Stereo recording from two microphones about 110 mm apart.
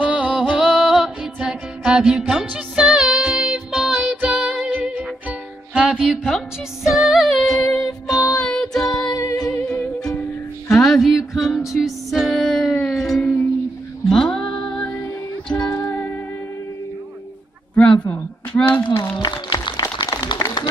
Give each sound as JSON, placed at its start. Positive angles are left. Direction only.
{"t": 0.0, "sound": "music", "side_deg": -10}
{"t": 7.6, "sound": "music", "side_deg": 30}
{"t": 8.4, "sound": "music", "side_deg": 5}
{"t": 8.8, "sound": "music", "side_deg": 35}
{"t": 9.5, "sound": "music", "side_deg": 20}
{"t": 10.7, "sound": "music", "side_deg": 0}
{"t": 13.2, "sound": "music", "side_deg": 20}
{"t": 14.0, "sound": "music", "side_deg": 5}
{"t": 15.5, "sound": "music", "side_deg": 35}
{"t": 18.0, "sound": "a sound", "side_deg": 15}
{"t": 19.1, "sound": "music", "side_deg": 40}